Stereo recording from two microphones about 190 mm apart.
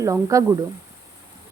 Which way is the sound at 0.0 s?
15° right (ahead or behind).